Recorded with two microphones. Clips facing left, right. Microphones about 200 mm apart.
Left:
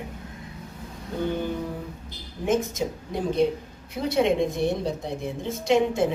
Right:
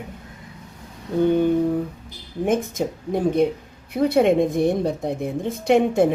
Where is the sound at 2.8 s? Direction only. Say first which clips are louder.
Right 6 dB; 55° right (ahead or behind).